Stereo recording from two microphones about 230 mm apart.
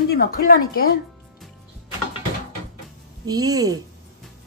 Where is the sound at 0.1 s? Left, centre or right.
Left.